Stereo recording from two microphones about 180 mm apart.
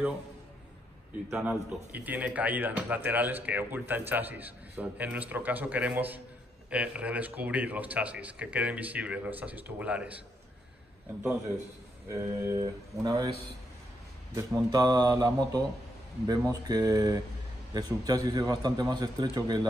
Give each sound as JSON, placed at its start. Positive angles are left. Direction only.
{"t": 1.3, "sound": "a man's voice", "side_deg": -5}
{"t": 12.1, "sound": "a man's voice", "side_deg": -15}
{"t": 14.3, "sound": "a man's voice", "side_deg": -20}